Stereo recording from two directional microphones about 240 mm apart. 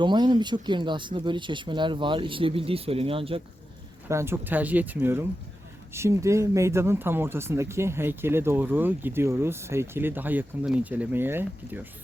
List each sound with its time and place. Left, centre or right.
0.0 s speech: centre
4.1 s speech: centre